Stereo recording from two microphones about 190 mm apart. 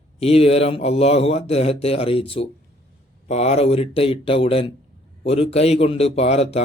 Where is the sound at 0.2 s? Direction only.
30° left (ahead or behind).